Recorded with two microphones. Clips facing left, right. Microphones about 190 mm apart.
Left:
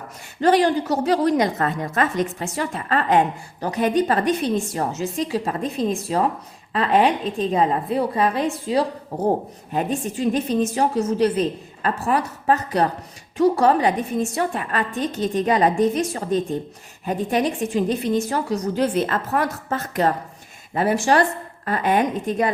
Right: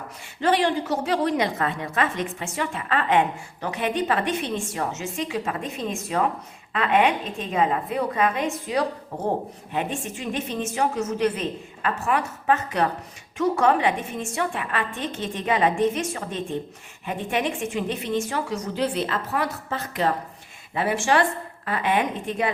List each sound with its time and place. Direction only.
0.4 s a woman's voice: 40° left (ahead or behind)